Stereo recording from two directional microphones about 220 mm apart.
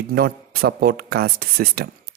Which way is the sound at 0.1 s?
45° right (ahead or behind).